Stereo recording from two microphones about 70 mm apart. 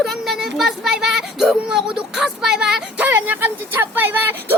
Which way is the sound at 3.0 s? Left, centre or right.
Right.